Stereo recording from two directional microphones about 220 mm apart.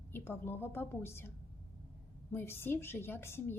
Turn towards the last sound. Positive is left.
turn(degrees=10)  # may be behind; listen again after turning